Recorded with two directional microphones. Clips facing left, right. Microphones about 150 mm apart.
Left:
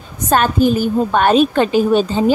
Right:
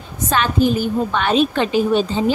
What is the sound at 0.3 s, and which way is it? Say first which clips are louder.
A woman's voice: left 4 dB; 45° left (ahead or behind).